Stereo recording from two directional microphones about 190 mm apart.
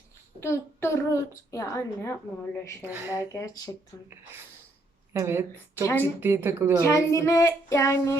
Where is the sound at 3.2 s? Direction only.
15° left (ahead or behind).